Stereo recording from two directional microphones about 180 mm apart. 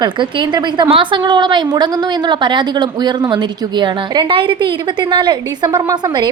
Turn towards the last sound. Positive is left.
turn(degrees=-25)  # may be behind; listen again after turning